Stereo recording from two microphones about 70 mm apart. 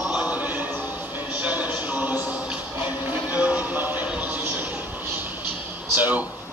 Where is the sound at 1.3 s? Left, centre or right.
Right.